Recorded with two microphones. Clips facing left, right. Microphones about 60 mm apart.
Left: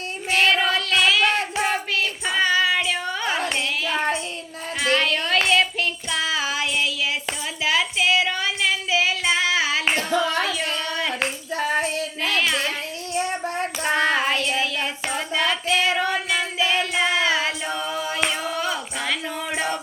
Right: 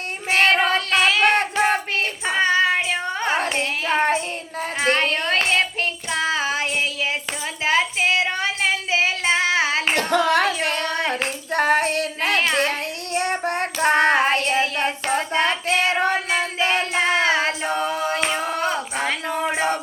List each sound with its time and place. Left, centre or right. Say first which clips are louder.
0.3 s child singing: right 2 dB; right
4.8 s a sound: right 1 dB; right
5.5 s child singing: left 1 dB; right
7.6 s female singing: right 2 dB; right
9.9 s female singing: right 4 dB; right
13.1 s child singing: right 3 dB; right
15.1 s music: right 2 dB; right